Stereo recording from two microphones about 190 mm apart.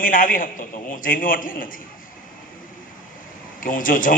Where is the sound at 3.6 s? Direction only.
45° left (ahead or behind).